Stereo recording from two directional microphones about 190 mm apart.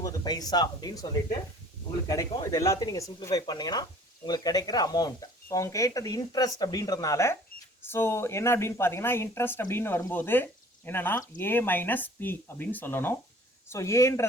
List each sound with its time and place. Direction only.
0.0 s speech: 20° left (ahead or behind)
2.0 s speech: 20° left (ahead or behind)